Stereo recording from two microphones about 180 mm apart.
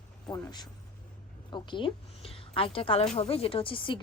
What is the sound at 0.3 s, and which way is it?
A woman's voice, 20° left (ahead or behind).